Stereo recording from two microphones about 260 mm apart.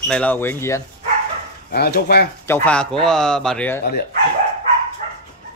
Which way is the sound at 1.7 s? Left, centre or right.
Left.